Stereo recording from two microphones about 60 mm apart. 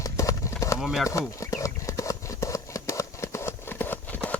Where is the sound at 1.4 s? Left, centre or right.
Left.